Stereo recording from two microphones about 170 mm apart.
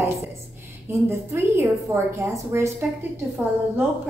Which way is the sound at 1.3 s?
15° right (ahead or behind).